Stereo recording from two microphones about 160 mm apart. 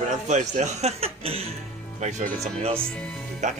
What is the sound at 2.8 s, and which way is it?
Speech, 5° left (ahead or behind).